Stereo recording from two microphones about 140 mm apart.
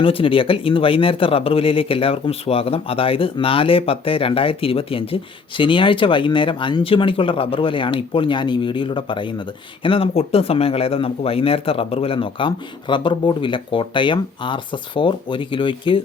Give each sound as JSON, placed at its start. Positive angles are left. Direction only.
{"t": 0.0, "sound": "speech", "side_deg": 40}